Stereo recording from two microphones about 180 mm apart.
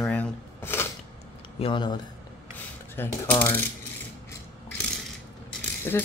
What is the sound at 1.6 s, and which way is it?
Speech, 25° left (ahead or behind).